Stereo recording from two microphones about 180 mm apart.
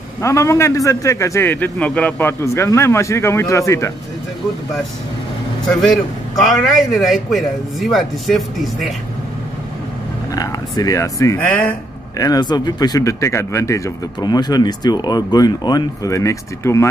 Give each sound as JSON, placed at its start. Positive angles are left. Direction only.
{"t": 0.2, "sound": "a man's voice", "side_deg": 15}
{"t": 5.8, "sound": "a man's voice", "side_deg": 0}
{"t": 10.3, "sound": "speech", "side_deg": 20}
{"t": 12.2, "sound": "speech", "side_deg": 20}